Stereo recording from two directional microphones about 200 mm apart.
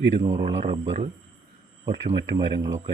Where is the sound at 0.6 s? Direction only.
35° right (ahead or behind).